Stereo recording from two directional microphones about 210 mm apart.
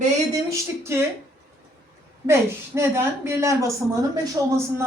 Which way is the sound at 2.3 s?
10° right (ahead or behind).